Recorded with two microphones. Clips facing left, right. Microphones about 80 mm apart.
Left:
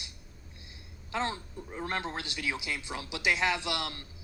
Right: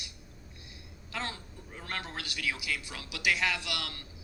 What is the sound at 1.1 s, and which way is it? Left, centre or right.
A woman's voice, left.